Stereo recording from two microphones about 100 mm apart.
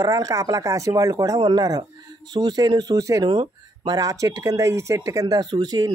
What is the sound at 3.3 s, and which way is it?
Speech, 45° right (ahead or behind).